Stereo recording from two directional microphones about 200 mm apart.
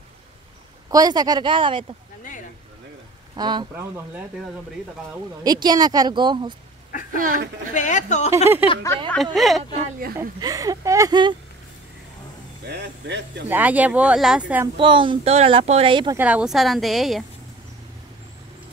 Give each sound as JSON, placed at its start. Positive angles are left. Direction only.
{"t": 0.8, "sound": "speech", "side_deg": -20}
{"t": 3.3, "sound": "speech", "side_deg": -20}
{"t": 5.4, "sound": "speech", "side_deg": -20}
{"t": 6.9, "sound": "a sound", "side_deg": 45}
{"t": 7.7, "sound": "speech", "side_deg": 35}
{"t": 8.6, "sound": "a woman's voice", "side_deg": -10}
{"t": 9.8, "sound": "speech", "side_deg": -45}
{"t": 10.4, "sound": "speech", "side_deg": -20}
{"t": 12.6, "sound": "speech", "side_deg": -55}
{"t": 13.5, "sound": "speech", "side_deg": -10}
{"t": 14.8, "sound": "speech", "side_deg": -25}
{"t": 16.2, "sound": "a woman's voice", "side_deg": -5}